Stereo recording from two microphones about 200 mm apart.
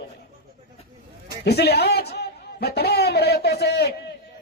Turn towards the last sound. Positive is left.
turn(degrees=55)  # may be behind; listen again after turning